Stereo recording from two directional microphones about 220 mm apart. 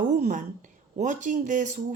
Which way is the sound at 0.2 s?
35° right (ahead or behind).